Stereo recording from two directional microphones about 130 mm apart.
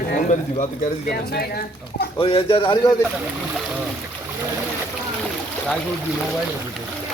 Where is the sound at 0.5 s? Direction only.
65° left (ahead or behind).